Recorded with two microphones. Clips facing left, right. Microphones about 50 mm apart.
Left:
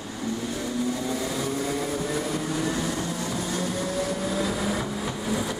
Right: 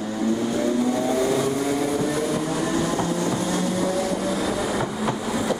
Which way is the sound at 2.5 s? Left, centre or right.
Centre.